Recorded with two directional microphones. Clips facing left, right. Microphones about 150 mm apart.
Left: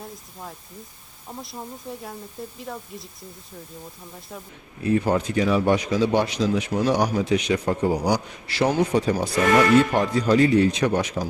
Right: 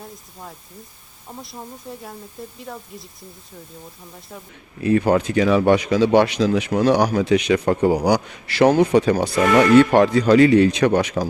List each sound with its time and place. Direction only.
0.0 s speech: centre (ahead or behind)
4.8 s speech: 80° right